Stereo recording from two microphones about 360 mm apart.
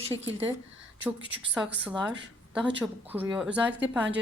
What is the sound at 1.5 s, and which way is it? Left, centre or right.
Speech, centre.